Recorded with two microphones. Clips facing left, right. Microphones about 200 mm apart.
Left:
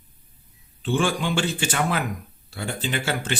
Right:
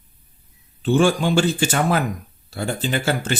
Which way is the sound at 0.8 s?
40° right (ahead or behind).